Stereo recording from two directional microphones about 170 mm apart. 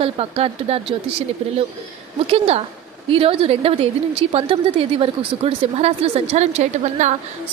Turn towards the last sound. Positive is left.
turn(degrees=-45)  # may be behind; listen again after turning